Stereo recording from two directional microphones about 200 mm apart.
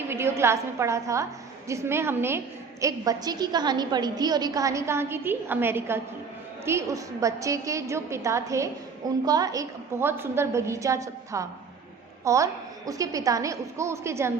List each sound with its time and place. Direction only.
0.1 s a woman's voice: 10° right (ahead or behind)